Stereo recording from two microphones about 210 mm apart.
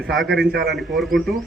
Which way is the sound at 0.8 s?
Centre (ahead or behind).